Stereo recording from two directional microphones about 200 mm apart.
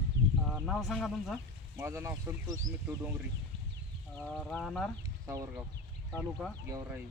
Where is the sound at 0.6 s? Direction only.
Centre (ahead or behind).